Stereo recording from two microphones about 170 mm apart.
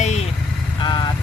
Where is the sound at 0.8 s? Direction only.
25° left (ahead or behind).